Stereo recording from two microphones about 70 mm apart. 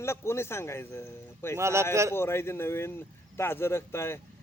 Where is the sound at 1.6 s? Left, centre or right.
Right.